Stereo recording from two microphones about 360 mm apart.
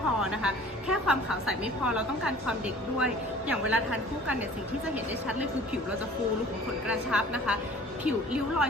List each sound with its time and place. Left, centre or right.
0.2 s a woman's voice: centre
7.1 s a woman's voice: centre